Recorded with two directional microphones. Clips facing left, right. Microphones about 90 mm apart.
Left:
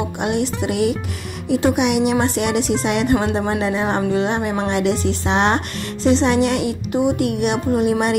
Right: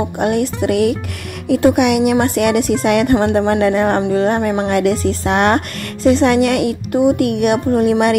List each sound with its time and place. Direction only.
0.2 s a woman's voice: 50° right (ahead or behind)
4.1 s a woman's voice: 45° right (ahead or behind)